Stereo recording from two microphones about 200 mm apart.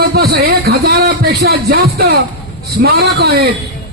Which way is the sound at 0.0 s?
50° right (ahead or behind).